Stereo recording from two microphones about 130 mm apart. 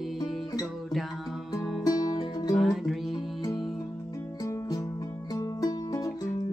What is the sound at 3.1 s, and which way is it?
Music, 35° left (ahead or behind).